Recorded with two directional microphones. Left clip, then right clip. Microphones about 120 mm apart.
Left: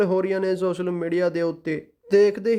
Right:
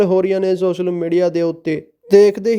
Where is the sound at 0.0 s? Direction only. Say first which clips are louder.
Right 7 dB; 35° right (ahead or behind).